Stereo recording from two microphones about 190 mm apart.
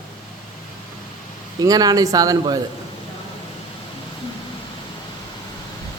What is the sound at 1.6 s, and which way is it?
Speech, 20° right (ahead or behind).